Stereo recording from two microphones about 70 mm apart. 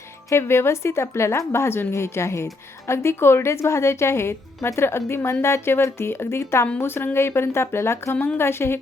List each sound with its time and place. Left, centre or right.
0.3 s a woman's voice: left